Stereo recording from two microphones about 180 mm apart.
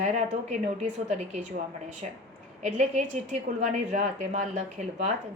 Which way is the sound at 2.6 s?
40° right (ahead or behind).